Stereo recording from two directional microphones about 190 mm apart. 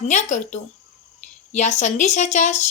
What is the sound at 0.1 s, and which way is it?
A woman's voice, 40° left (ahead or behind).